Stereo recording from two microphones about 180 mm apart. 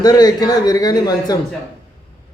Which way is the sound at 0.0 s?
20° left (ahead or behind).